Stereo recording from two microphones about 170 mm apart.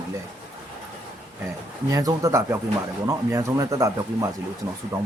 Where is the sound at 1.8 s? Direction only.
20° right (ahead or behind).